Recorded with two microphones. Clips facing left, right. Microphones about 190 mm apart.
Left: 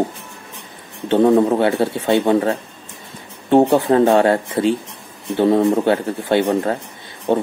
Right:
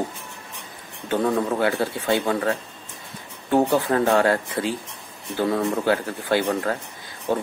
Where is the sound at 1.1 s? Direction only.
30° left (ahead or behind).